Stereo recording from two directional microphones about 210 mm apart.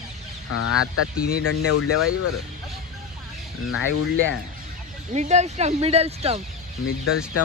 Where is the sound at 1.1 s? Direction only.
45° left (ahead or behind).